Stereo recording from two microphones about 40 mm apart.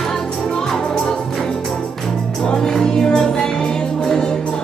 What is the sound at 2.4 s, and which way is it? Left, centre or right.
Music, centre.